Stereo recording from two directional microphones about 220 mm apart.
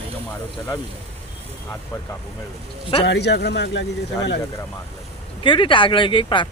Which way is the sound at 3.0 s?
50° left (ahead or behind).